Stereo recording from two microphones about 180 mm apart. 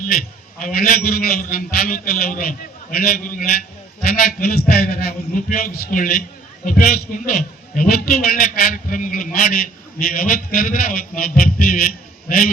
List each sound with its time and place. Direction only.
0.6 s a man's voice: 55° left (ahead or behind)